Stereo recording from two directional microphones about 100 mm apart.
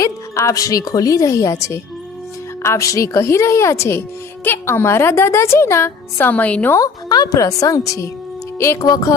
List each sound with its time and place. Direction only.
0.0 s a woman's voice: 35° left (ahead or behind); by 6.7 s 15° left (ahead or behind)
6.7 s speech: 40° left (ahead or behind)